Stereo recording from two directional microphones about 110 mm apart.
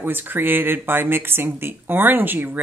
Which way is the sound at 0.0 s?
15° right (ahead or behind).